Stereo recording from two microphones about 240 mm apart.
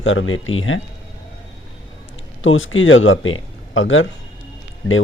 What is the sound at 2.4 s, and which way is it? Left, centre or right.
Speech, left.